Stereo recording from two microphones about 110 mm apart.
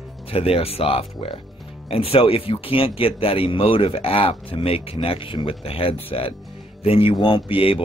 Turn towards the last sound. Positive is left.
turn(degrees=55)  # may be behind; listen again after turning